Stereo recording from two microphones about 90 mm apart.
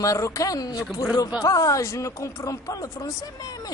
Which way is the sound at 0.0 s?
40° left (ahead or behind).